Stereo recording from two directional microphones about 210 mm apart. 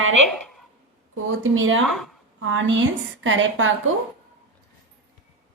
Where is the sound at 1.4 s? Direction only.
70° right (ahead or behind).